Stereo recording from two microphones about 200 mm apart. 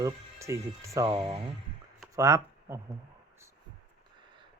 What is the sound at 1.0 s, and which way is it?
Speech, 25° right (ahead or behind).